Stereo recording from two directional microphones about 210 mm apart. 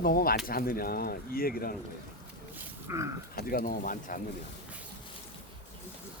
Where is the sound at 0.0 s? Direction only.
45° left (ahead or behind).